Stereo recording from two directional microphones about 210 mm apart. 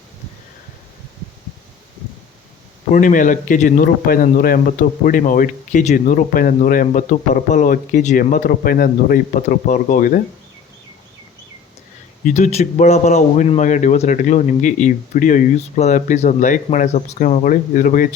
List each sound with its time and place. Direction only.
2.9 s speech: 40° left (ahead or behind)
12.2 s speech: 35° left (ahead or behind)